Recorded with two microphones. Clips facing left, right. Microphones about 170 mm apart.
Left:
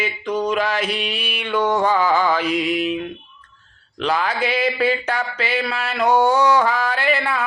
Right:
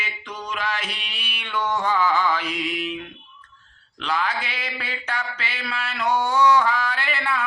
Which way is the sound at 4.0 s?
40° left (ahead or behind).